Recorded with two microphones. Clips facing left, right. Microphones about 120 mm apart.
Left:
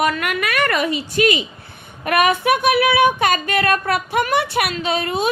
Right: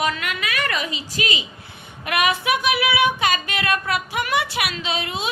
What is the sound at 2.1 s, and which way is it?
Female singing, 50° left (ahead or behind).